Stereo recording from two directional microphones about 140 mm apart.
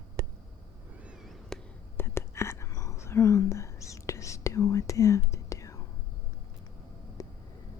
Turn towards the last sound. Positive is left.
turn(degrees=25)  # may be behind; listen again after turning